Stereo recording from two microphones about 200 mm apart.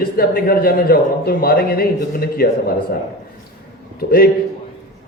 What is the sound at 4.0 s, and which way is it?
Speech, 50° left (ahead or behind).